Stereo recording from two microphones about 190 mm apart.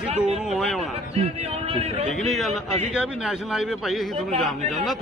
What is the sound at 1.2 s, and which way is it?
Speech, 30° right (ahead or behind).